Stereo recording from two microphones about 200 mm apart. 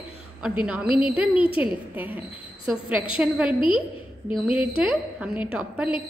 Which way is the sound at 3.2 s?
5° right (ahead or behind).